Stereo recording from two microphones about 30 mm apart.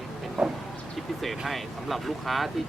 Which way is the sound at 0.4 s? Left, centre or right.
Centre.